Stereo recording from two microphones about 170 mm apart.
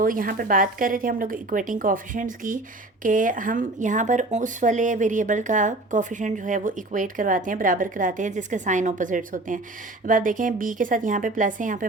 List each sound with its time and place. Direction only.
0.0 s a woman's voice: 55° right (ahead or behind)